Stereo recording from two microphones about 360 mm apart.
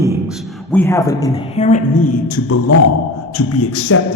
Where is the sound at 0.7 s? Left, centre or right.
Centre; by 2.6 s left.